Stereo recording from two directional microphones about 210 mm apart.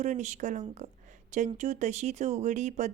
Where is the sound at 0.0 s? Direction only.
35° right (ahead or behind).